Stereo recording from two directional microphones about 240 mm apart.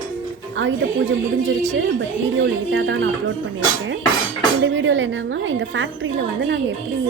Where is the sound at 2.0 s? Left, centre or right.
Right.